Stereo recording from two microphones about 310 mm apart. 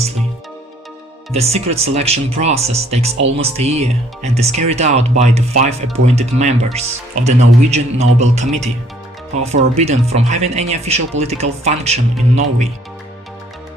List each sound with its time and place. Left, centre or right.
1.3 s speech: centre